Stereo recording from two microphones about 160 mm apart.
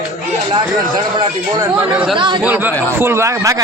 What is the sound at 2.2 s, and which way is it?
Speech, 30° right (ahead or behind).